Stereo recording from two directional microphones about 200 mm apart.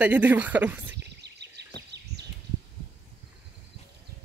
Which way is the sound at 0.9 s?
55° right (ahead or behind).